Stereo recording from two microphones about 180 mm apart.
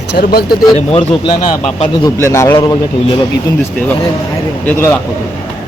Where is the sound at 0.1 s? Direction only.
65° left (ahead or behind).